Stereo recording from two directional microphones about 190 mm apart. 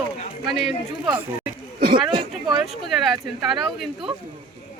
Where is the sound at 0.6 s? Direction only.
Centre (ahead or behind).